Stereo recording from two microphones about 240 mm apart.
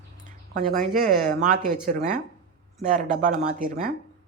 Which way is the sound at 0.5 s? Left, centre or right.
Right.